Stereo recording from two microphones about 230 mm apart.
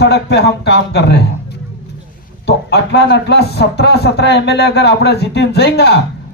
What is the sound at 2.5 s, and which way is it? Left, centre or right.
Speech, left.